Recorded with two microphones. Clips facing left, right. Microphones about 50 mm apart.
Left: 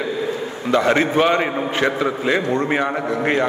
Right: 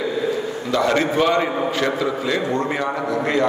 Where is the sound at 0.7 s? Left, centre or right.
Left.